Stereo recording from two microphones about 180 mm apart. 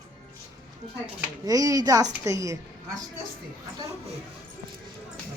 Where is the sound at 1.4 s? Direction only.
20° right (ahead or behind).